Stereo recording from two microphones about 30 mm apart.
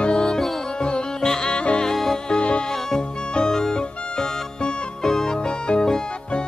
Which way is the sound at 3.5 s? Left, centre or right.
Centre.